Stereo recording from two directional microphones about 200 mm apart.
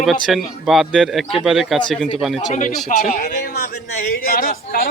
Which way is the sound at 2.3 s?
30° left (ahead or behind).